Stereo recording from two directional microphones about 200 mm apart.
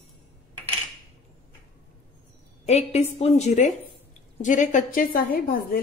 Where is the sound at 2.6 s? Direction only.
30° left (ahead or behind).